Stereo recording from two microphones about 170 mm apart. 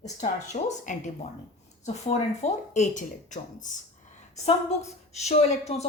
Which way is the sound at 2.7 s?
45° left (ahead or behind).